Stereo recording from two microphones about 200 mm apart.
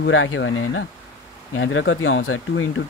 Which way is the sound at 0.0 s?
80° left.